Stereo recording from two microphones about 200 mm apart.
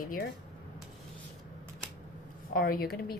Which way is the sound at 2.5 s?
50° left (ahead or behind).